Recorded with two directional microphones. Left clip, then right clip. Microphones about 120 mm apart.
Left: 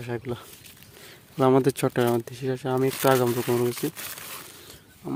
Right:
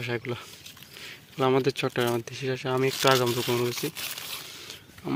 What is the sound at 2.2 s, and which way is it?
Speech, 50° left (ahead or behind).